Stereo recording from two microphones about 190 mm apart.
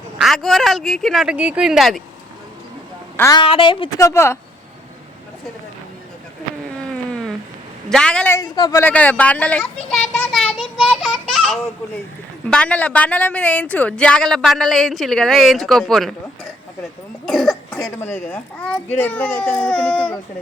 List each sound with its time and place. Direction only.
0.2 s a woman's voice: centre (ahead or behind)
3.2 s a woman's voice: 15° left (ahead or behind)
3.4 s speech: 25° left (ahead or behind)
6.9 s a sound: 5° left (ahead or behind)
7.9 s a woman's voice: 5° left (ahead or behind)
8.4 s speech: 20° left (ahead or behind)
10.3 s child singing: centre (ahead or behind)
12.5 s a woman's voice: 5° left (ahead or behind)
17.2 s cough: centre (ahead or behind)
17.7 s a woman's voice: 5° left (ahead or behind)